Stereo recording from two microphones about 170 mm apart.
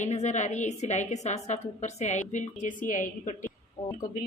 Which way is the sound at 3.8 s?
20° left (ahead or behind).